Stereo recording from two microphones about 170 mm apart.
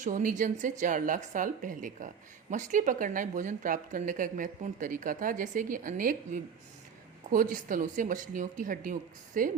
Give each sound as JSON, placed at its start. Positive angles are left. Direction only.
{"t": 0.0, "sound": "a woman's voice", "side_deg": -50}